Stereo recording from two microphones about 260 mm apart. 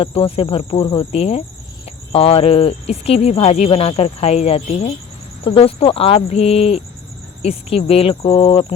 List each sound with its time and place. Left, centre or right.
0.0 s speech: left